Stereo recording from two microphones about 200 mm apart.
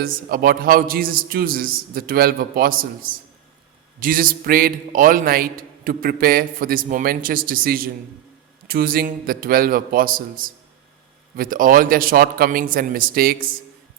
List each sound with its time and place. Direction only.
0.0 s a man's voice: 45° right (ahead or behind)